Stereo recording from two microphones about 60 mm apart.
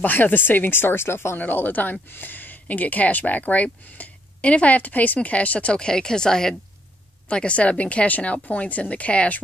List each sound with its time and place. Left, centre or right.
0.0 s speech: left
1.4 s speech: left